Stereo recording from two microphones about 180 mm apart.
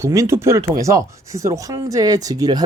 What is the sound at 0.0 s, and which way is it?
Speech, 15° right (ahead or behind).